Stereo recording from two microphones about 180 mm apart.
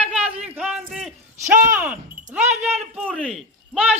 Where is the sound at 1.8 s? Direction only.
10° right (ahead or behind).